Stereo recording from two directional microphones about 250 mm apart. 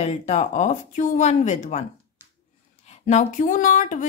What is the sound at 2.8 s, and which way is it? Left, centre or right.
Speech, left.